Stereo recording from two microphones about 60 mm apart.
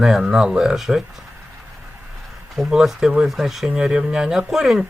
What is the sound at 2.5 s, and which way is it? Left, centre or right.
Speech, centre.